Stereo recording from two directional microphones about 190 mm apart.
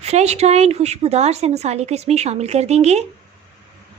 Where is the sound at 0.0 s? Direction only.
35° right (ahead or behind).